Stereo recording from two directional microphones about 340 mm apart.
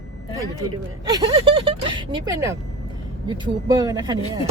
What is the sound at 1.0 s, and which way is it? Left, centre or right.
Speech, centre.